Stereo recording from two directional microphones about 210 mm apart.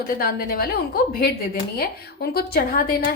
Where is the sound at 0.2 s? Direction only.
45° left (ahead or behind).